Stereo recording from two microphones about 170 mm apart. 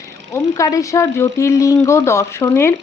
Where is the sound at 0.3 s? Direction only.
20° left (ahead or behind).